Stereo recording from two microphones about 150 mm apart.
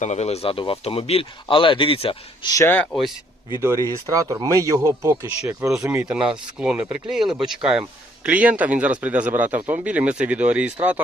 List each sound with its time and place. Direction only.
0.0 s speech: 50° left (ahead or behind)
2.5 s speech: 20° left (ahead or behind)
3.6 s speech: 20° right (ahead or behind)